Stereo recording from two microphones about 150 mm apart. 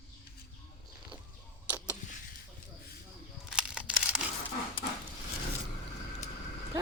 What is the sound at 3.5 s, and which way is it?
Camera, 5° right (ahead or behind).